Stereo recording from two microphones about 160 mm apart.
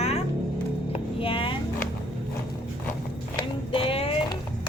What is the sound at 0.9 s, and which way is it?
Music, 35° left (ahead or behind).